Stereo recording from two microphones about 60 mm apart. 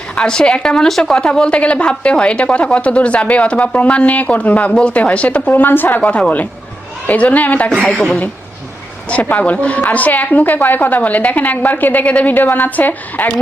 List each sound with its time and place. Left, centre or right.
0.2 s a woman's voice: centre
1.3 s speech: centre
5.5 s speech: left
6.0 s speech: left
9.0 s speech: left